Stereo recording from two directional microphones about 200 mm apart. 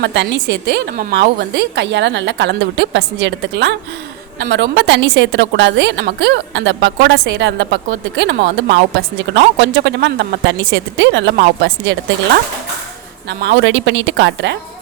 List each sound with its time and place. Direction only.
0.0 s a woman's voice: 60° right (ahead or behind)
13.4 s a woman's voice: 60° right (ahead or behind)